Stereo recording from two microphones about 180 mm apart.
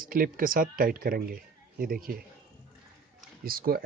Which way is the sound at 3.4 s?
55° right (ahead or behind).